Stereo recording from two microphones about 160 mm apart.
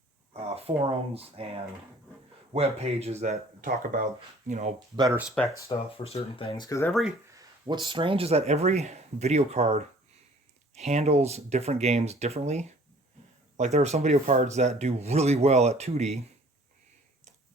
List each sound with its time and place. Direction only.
0.5 s speech: 40° right (ahead or behind); by 4.0 s 60° right (ahead or behind)
4.4 s speech: 45° right (ahead or behind)
5.4 s speech: 5° left (ahead or behind)
6.0 s speech: 35° left (ahead or behind); by 6.9 s 20° left (ahead or behind)
7.3 s speech: 25° right (ahead or behind); by 16.2 s 45° right (ahead or behind)